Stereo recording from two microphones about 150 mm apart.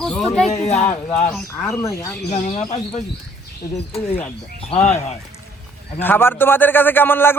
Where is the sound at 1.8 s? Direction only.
20° left (ahead or behind).